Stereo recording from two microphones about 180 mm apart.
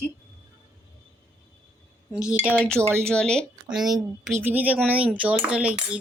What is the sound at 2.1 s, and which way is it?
Speech, 5° right (ahead or behind).